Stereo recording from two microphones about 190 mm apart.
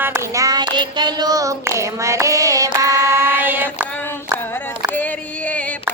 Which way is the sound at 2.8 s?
15° right (ahead or behind).